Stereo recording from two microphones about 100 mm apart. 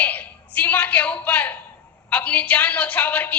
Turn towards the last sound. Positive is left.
turn(degrees=15)  # may be behind; listen again after turning